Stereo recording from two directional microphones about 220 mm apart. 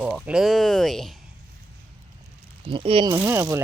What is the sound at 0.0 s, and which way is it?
Speech, 5° right (ahead or behind).